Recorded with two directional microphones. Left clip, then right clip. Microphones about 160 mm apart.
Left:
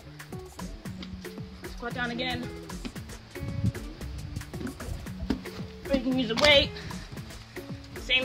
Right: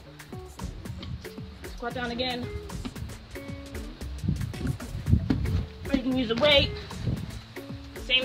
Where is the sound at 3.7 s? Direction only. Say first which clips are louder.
Left 2 dB; centre (ahead or behind).